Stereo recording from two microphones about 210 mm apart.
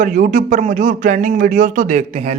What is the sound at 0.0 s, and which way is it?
Speech, 40° right (ahead or behind).